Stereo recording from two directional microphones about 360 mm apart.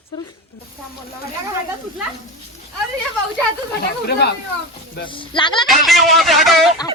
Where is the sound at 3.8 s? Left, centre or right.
Left.